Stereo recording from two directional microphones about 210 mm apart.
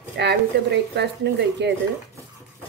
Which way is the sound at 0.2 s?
55° right (ahead or behind).